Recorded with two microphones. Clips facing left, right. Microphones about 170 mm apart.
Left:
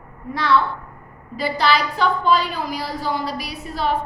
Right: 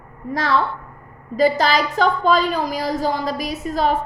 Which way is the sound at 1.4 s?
45° right (ahead or behind).